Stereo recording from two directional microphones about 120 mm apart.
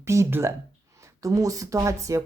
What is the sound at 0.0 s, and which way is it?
Speech, 25° right (ahead or behind).